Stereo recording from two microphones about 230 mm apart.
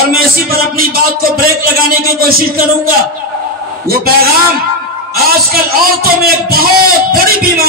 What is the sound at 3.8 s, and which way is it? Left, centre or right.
Speech, right.